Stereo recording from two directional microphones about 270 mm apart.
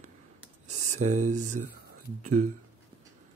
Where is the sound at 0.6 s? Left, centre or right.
Right.